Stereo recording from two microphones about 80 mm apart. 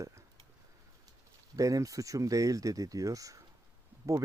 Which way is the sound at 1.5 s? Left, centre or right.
Right.